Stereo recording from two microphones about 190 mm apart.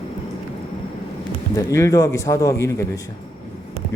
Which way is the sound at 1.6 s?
15° left (ahead or behind).